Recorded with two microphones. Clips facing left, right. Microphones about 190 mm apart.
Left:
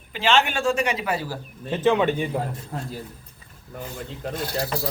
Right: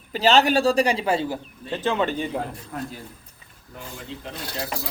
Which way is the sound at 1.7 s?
15° left (ahead or behind).